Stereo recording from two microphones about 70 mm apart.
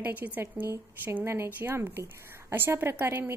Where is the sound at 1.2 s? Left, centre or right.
Right.